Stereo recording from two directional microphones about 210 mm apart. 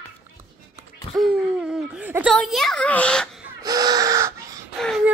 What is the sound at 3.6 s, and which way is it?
Gasp, 15° right (ahead or behind).